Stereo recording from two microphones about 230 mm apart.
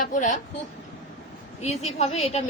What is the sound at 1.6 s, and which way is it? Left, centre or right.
Speech, left.